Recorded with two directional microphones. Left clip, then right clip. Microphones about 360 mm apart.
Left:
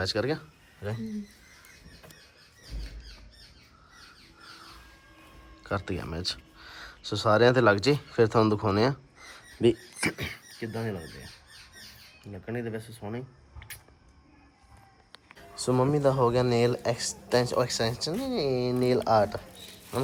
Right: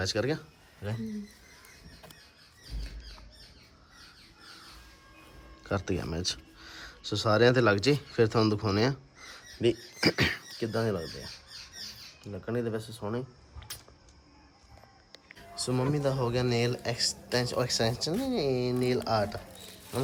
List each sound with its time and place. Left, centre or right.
0.0 s speech: centre
5.6 s speech: centre
10.2 s speech: right
10.6 s speech: centre
12.5 s speech: centre
15.4 s speech: centre